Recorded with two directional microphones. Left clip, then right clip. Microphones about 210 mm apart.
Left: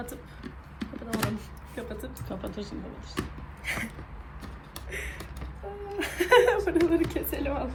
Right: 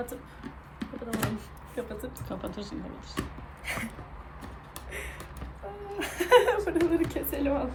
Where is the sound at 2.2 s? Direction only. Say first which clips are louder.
Left 1 dB; 5° right (ahead or behind).